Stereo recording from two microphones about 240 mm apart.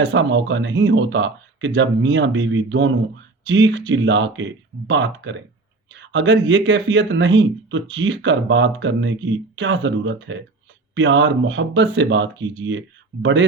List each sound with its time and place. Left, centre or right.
0.0 s speech: right